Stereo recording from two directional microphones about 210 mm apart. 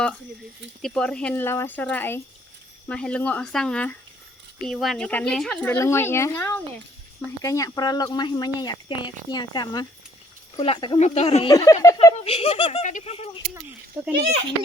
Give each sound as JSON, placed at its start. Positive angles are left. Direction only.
{"t": 0.8, "sound": "a woman's voice", "side_deg": 5}
{"t": 11.5, "sound": "speech", "side_deg": 15}
{"t": 12.1, "sound": "speech", "side_deg": 25}
{"t": 14.0, "sound": "a child's voice", "side_deg": -10}